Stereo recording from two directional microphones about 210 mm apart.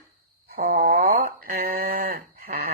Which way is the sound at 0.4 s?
50° right (ahead or behind).